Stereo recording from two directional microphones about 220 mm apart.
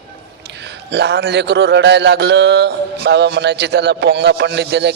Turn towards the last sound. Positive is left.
turn(degrees=-50)  # may be behind; listen again after turning